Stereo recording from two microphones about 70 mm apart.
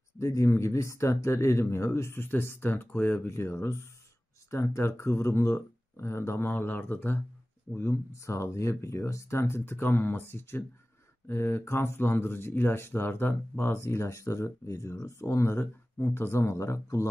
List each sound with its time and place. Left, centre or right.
0.2 s speech: left
3.3 s speech: left
15.2 s speech: left